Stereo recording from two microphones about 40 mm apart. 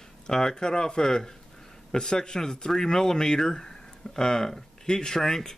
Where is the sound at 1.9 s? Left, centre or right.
Centre.